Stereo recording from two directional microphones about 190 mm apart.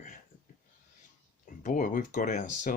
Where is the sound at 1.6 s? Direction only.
45° left (ahead or behind).